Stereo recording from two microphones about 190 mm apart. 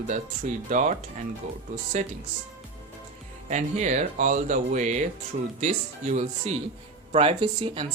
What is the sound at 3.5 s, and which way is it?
Speech, 40° right (ahead or behind).